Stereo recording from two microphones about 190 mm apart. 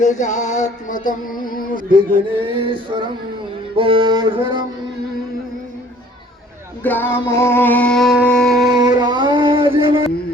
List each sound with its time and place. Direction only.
0.0 s music: 40° left (ahead or behind)
2.4 s music: 30° right (ahead or behind)
6.8 s music: 10° left (ahead or behind)
8.8 s music: 20° right (ahead or behind)